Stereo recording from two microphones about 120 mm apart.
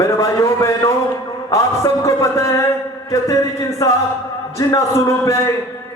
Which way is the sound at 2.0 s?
25° left (ahead or behind).